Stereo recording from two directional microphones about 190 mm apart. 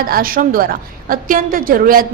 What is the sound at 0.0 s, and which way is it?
A woman's voice, 50° right (ahead or behind).